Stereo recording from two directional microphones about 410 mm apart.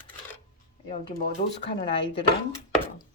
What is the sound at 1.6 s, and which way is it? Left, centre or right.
Speech, centre.